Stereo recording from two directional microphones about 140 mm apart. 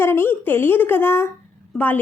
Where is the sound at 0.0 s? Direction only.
15° left (ahead or behind).